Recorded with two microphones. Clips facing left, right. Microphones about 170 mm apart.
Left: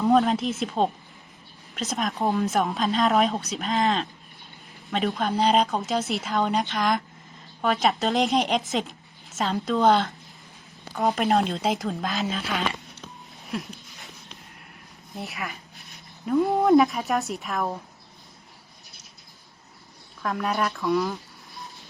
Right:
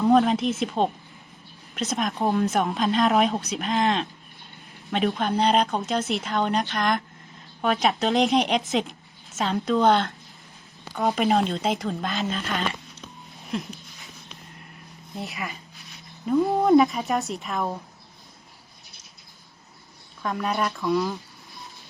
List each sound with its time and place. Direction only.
0.0 s a woman's voice: centre (ahead or behind)
13.4 s a sound: centre (ahead or behind)
15.1 s a woman's voice: centre (ahead or behind)
20.2 s a woman's voice: centre (ahead or behind)